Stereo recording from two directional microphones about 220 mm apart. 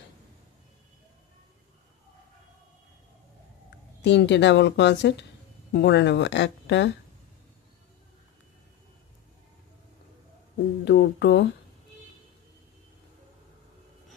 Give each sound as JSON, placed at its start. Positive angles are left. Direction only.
{"t": 4.0, "sound": "speech", "side_deg": 50}
{"t": 10.9, "sound": "speech", "side_deg": 50}